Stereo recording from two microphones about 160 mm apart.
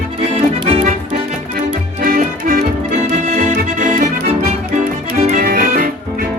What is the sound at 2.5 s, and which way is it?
Music, 45° right (ahead or behind).